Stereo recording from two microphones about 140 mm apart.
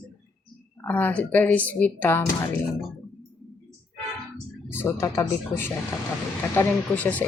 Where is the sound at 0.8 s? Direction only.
10° left (ahead or behind).